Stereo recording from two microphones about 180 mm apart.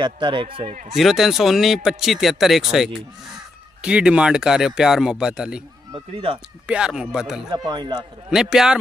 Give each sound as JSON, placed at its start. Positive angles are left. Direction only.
{"t": 0.0, "sound": "speech", "side_deg": -25}
{"t": 0.8, "sound": "speech", "side_deg": 0}
{"t": 6.7, "sound": "speech", "side_deg": -5}
{"t": 7.5, "sound": "speech", "side_deg": -25}
{"t": 8.3, "sound": "speech", "side_deg": 0}